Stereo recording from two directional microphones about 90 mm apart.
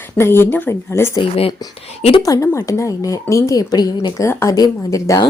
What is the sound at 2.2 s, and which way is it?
A woman's voice, 35° left (ahead or behind).